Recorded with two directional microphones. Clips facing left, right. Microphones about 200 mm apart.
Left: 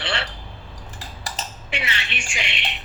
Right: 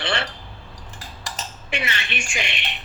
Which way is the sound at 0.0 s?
45° right (ahead or behind).